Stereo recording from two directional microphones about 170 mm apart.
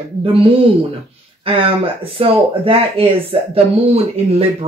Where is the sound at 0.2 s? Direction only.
30° right (ahead or behind).